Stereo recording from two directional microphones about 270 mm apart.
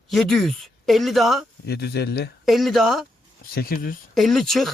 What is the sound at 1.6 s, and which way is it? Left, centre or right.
Speech, left.